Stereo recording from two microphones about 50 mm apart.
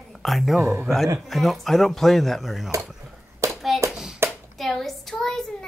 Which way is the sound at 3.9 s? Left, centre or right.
Centre.